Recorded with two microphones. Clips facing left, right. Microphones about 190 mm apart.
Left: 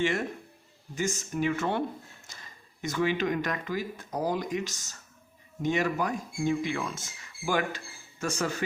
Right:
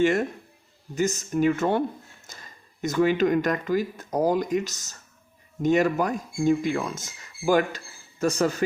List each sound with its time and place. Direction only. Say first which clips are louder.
0.0 s a man's voice: right 7 dB; 45° right (ahead or behind)